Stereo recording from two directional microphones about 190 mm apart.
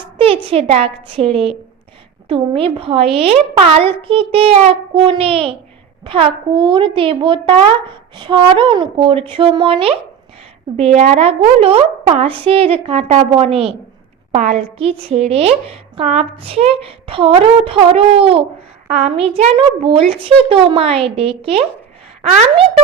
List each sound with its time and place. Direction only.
0.2 s a woman's voice: 30° right (ahead or behind)